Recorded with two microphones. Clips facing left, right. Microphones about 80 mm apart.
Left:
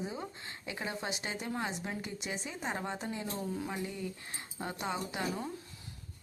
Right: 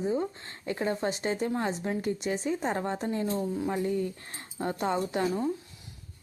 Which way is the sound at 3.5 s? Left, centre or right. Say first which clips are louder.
Right 8 dB; right.